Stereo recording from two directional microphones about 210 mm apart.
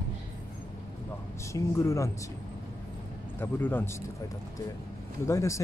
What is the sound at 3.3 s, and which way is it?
Speech, 10° left (ahead or behind).